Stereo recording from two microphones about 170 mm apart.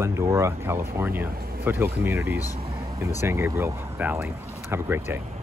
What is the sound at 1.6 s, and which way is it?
Speech, 15° right (ahead or behind).